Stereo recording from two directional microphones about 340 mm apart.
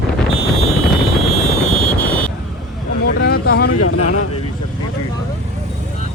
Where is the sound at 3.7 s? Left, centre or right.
Left.